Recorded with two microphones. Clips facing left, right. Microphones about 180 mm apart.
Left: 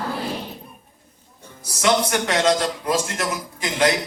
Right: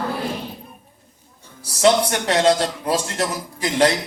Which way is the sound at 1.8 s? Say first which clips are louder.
Right 3 dB; 30° right (ahead or behind).